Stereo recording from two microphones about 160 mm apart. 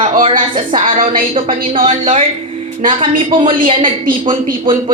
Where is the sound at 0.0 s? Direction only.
35° right (ahead or behind).